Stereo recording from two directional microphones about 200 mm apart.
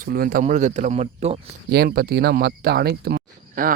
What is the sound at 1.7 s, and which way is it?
Speech, 55° right (ahead or behind).